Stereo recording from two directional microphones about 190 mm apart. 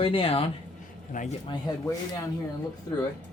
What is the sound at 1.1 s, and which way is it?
Speech, 40° left (ahead or behind).